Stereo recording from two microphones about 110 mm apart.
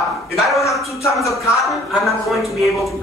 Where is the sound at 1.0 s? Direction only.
30° left (ahead or behind).